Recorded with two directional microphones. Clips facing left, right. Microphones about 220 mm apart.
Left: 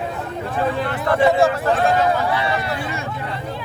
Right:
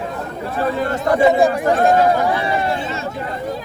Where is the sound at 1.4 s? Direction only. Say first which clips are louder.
Right 2 dB; 15° right (ahead or behind).